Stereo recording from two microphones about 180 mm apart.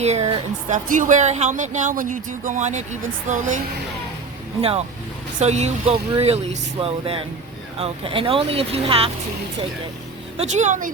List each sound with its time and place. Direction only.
0.0 s speech: 35° right (ahead or behind)
5.4 s speech: 40° right (ahead or behind)
10.3 s speech: 40° right (ahead or behind)